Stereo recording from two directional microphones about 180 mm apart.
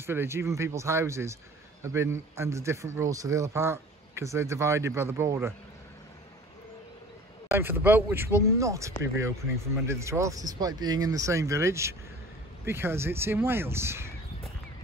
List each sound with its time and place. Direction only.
0.0 s a man's voice: 15° right (ahead or behind)
7.5 s a man's voice: 10° right (ahead or behind)